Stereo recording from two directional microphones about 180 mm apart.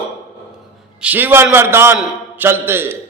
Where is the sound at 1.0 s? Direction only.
10° right (ahead or behind).